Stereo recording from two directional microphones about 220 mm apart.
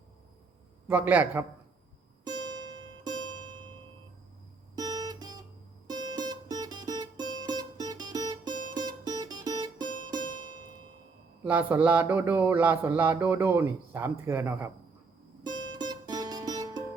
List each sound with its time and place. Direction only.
0.9 s speech: 10° right (ahead or behind)
4.7 s guitar: 15° right (ahead or behind)
5.9 s music: 20° right (ahead or behind)
11.4 s speech: 10° right (ahead or behind)
15.4 s music: 20° right (ahead or behind)